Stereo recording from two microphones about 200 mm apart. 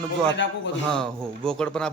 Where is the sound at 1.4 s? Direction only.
5° left (ahead or behind).